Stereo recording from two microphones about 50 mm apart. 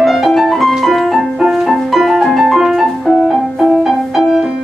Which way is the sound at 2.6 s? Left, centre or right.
Centre.